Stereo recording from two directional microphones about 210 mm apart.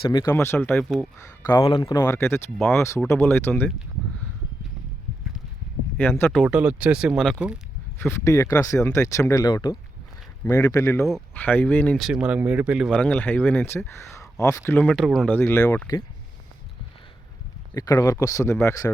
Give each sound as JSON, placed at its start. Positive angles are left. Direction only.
{"t": 0.0, "sound": "speech", "side_deg": 20}
{"t": 1.5, "sound": "speech", "side_deg": 15}
{"t": 6.0, "sound": "speech", "side_deg": 10}
{"t": 6.4, "sound": "speech", "side_deg": -5}
{"t": 7.9, "sound": "speech", "side_deg": 10}
{"t": 17.7, "sound": "speech", "side_deg": 15}